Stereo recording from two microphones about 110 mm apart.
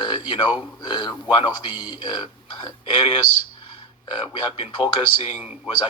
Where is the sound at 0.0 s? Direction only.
45° left (ahead or behind).